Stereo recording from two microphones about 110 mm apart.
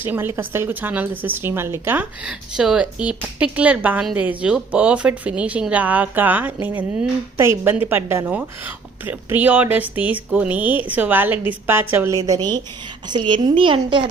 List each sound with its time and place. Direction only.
0.0 s speech: 20° right (ahead or behind)
2.2 s a woman's voice: 5° right (ahead or behind); by 14.0 s 50° right (ahead or behind)